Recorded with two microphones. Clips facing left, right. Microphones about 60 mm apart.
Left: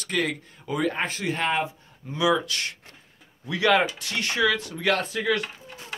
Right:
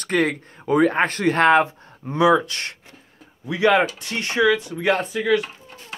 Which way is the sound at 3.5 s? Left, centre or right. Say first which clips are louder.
Right 4 dB; right.